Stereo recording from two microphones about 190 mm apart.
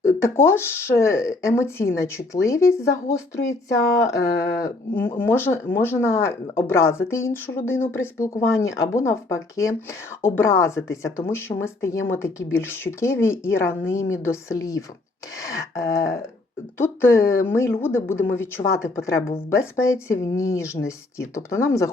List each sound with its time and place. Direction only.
0.0 s speech: 15° left (ahead or behind)
4.6 s speech: 10° left (ahead or behind)